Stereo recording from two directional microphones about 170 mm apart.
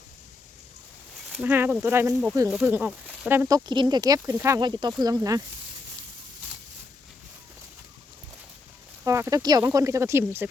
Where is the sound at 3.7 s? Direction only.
25° right (ahead or behind).